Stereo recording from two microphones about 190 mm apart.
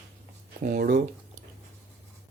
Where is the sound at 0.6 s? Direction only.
50° right (ahead or behind).